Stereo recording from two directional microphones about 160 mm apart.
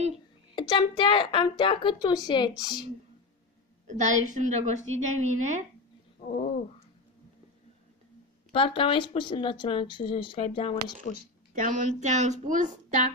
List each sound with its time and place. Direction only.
0.6 s a woman's voice: 30° left (ahead or behind)
3.9 s a woman's voice: 50° right (ahead or behind)
6.2 s bird: 50° left (ahead or behind)
8.5 s speech: 35° left (ahead or behind)
11.5 s a woman's voice: 55° right (ahead or behind)